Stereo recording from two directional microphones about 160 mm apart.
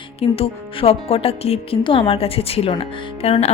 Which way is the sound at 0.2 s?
35° left (ahead or behind).